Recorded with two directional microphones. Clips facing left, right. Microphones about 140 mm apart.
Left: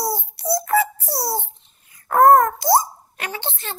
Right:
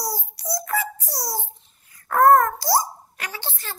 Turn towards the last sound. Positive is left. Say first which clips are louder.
# left 5 dB
turn(degrees=20)  # may be behind; listen again after turning